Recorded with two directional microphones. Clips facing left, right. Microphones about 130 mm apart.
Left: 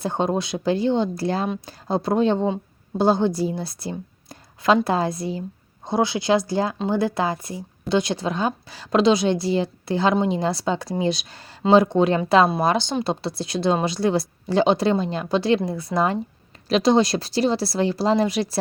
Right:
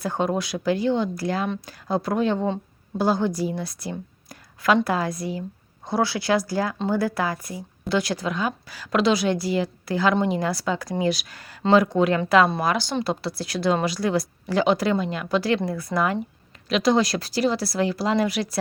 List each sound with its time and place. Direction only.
0.0 s a woman's voice: 25° left (ahead or behind)